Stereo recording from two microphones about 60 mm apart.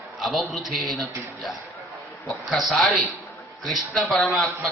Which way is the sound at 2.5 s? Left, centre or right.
Centre.